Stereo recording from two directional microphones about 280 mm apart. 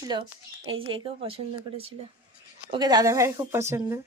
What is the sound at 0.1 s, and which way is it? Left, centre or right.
A woman's voice, centre.